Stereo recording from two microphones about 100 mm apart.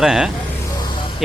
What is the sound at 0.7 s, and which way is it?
Music, 45° left (ahead or behind).